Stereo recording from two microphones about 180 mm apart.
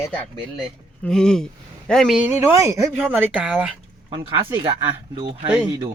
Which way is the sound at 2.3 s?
15° right (ahead or behind).